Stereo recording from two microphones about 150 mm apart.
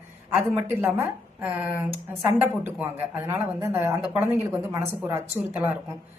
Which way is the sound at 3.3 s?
15° right (ahead or behind).